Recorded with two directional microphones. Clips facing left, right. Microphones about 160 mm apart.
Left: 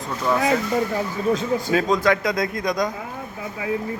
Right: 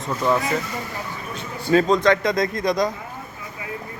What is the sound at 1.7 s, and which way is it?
A man's voice, 5° left (ahead or behind).